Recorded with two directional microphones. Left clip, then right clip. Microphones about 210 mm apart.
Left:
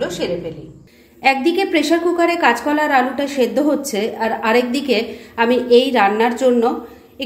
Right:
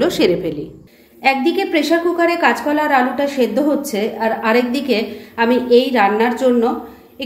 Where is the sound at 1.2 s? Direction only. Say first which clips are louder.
Even; 10° left (ahead or behind).